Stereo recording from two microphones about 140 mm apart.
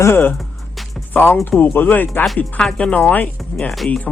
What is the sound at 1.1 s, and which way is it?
Speech, 15° left (ahead or behind).